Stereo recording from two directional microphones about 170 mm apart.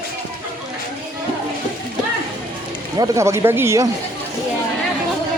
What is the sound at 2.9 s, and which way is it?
Speech, 20° right (ahead or behind).